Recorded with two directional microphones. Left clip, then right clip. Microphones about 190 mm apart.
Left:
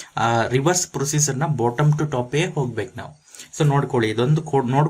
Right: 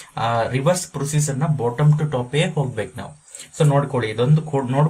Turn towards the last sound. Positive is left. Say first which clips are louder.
# left 1 dB
turn(degrees=45)  # may be behind; listen again after turning